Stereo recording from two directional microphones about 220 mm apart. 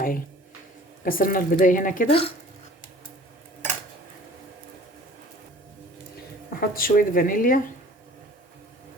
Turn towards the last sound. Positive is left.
turn(degrees=40)  # may be behind; listen again after turning